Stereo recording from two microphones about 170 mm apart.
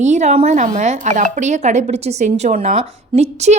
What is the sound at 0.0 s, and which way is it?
A woman's voice, 45° right (ahead or behind).